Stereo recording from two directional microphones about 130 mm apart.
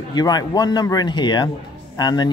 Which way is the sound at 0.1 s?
30° left (ahead or behind).